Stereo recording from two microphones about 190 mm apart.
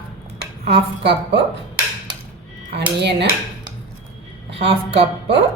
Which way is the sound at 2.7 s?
65° right (ahead or behind).